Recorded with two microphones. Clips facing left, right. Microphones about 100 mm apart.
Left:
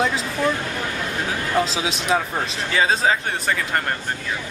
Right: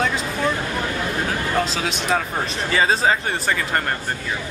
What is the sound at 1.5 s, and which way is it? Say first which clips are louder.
Speech: left 4 dB; centre (ahead or behind).